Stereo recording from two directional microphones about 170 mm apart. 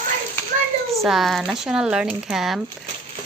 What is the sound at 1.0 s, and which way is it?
Speech, centre (ahead or behind).